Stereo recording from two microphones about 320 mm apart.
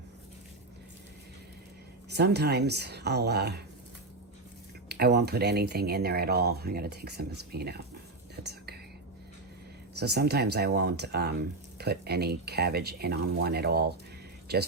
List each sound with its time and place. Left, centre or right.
2.0 s speech: right
4.9 s speech: right
10.0 s speech: right